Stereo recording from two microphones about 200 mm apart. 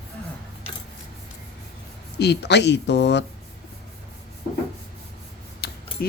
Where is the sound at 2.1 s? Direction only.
55° left (ahead or behind).